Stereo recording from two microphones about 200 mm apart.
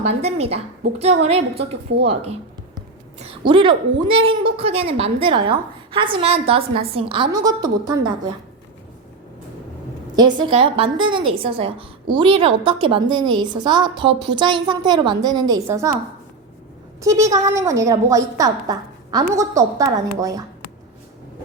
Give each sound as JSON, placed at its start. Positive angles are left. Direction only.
{"t": 0.1, "sound": "a woman's voice", "side_deg": -30}
{"t": 10.2, "sound": "a woman's voice", "side_deg": -20}
{"t": 17.0, "sound": "a woman's voice", "side_deg": -15}